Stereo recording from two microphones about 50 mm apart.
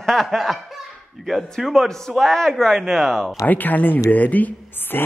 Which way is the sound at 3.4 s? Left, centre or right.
Left.